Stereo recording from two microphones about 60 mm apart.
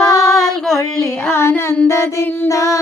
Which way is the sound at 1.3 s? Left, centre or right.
Left.